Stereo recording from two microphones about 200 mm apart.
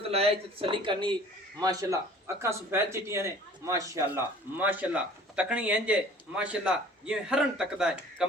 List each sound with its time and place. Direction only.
0.1 s a man's voice: 30° right (ahead or behind); by 8.3 s 5° right (ahead or behind)